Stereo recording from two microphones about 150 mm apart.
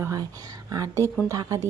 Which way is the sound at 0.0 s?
25° right (ahead or behind).